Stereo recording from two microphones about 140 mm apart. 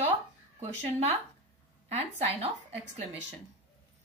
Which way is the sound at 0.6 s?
50° right (ahead or behind).